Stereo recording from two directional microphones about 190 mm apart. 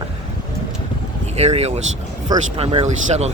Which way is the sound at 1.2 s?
35° right (ahead or behind).